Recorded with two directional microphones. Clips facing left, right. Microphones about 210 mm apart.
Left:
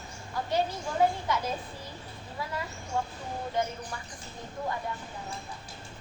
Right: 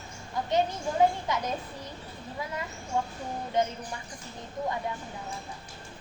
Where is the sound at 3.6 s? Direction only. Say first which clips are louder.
Right 3 dB; 20° right (ahead or behind).